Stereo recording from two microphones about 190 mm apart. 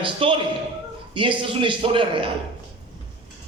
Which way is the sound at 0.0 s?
25° right (ahead or behind).